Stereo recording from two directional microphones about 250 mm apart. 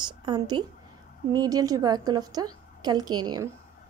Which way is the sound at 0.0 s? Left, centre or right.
Centre.